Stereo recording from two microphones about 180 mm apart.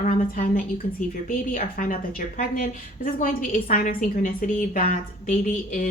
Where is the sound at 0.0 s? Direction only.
50° left (ahead or behind).